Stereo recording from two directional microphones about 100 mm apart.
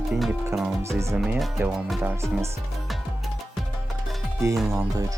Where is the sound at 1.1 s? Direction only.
10° right (ahead or behind).